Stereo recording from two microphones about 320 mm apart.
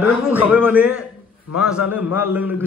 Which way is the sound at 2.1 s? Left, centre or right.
Centre.